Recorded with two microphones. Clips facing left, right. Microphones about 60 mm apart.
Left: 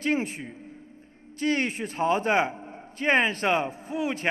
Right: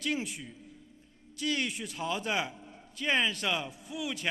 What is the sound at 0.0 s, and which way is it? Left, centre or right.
A man's voice, left.